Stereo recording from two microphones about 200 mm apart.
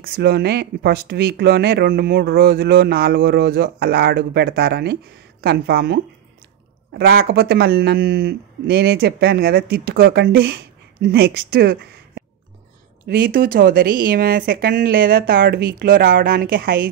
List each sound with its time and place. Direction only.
0.0 s speech: 50° right (ahead or behind)